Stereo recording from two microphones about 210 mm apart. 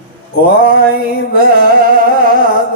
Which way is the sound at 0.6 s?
45° right (ahead or behind).